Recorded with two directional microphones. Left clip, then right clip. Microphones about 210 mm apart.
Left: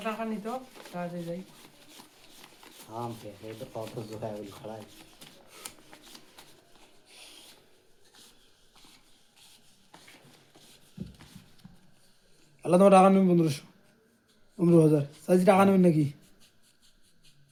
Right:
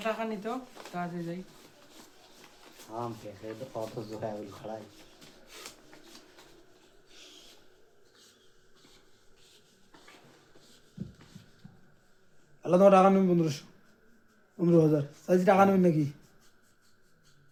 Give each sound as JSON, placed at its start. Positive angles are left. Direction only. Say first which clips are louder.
{"t": 0.0, "sound": "speech", "louder": "right 1 dB", "side_deg": -30}
{"t": 2.9, "sound": "speech", "louder": "even", "side_deg": 10}
{"t": 5.9, "sound": "shuffling cards", "louder": "left 2 dB", "side_deg": 45}
{"t": 6.4, "sound": "a sound", "louder": "left 2 dB", "side_deg": 45}
{"t": 12.6, "sound": "speech", "louder": "left 1 dB", "side_deg": 35}